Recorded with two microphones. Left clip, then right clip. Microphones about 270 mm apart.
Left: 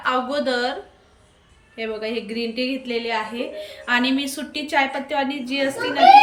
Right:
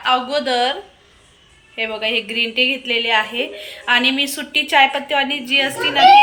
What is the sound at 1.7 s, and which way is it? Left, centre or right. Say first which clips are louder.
A woman's voice: right 7 dB; centre.